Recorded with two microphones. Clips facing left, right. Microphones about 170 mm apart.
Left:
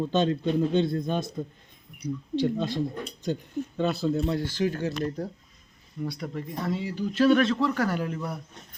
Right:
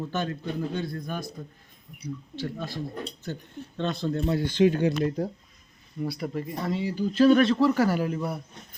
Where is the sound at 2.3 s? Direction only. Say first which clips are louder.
Left 9 dB; 20° left (ahead or behind).